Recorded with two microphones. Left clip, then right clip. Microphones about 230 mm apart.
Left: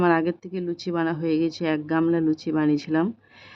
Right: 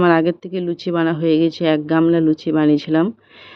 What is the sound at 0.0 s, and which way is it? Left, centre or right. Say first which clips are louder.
A man's voice: right 7 dB; centre.